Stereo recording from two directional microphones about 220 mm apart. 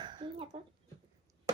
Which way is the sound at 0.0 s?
20° right (ahead or behind).